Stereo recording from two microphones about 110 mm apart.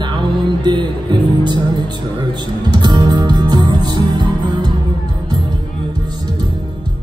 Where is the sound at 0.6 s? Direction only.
45° right (ahead or behind).